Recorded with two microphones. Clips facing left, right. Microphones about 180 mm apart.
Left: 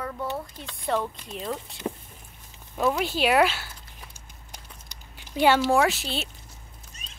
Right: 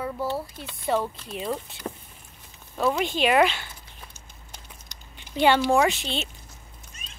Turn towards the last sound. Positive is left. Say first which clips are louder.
# right 1 dB
turn(degrees=35)  # may be behind; listen again after turning